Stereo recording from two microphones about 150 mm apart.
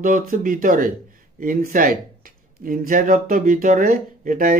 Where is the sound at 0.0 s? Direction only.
65° right (ahead or behind).